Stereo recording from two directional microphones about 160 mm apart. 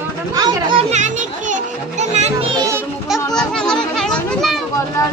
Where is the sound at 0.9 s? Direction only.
50° right (ahead or behind).